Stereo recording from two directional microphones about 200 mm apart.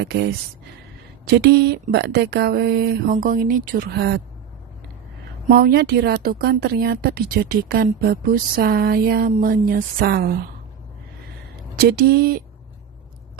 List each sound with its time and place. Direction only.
0.0 s speech: 55° right (ahead or behind)
5.5 s speech: 50° right (ahead or behind)
11.8 s speech: 50° right (ahead or behind)